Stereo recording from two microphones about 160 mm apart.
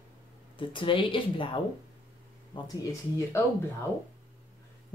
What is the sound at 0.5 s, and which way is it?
Speech, 30° left (ahead or behind).